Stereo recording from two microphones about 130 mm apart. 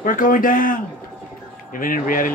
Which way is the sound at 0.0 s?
90° left.